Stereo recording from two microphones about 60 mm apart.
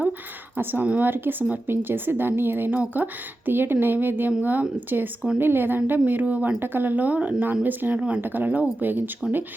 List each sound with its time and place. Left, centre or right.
0.5 s speech: right
7.9 s speech: centre
8.2 s speech: right